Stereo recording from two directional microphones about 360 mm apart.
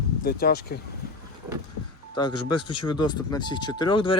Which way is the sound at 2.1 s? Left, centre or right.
Centre.